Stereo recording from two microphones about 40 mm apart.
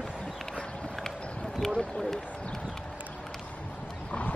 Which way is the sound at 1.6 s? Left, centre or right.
Centre.